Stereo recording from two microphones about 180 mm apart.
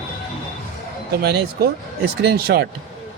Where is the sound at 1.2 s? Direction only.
60° right (ahead or behind).